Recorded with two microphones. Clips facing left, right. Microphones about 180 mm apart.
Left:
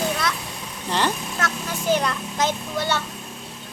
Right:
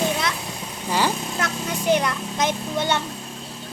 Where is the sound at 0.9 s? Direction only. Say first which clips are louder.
Right 1 dB; 10° right (ahead or behind).